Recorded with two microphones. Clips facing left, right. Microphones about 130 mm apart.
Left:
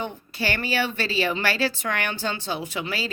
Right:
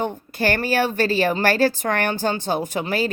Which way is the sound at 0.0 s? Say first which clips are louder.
Right 6 dB; 45° right (ahead or behind).